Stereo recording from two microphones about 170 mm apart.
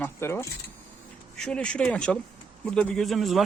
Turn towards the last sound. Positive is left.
turn(degrees=0)  # may be behind; listen again after turning